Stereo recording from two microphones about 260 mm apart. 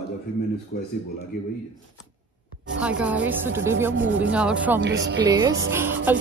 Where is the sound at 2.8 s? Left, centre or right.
Centre.